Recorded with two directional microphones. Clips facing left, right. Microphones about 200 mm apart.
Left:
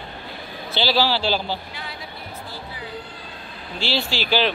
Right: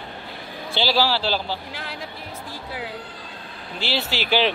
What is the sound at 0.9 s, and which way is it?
Speech, 5° right (ahead or behind).